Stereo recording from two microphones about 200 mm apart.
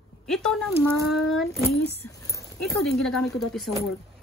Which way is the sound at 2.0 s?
15° left (ahead or behind).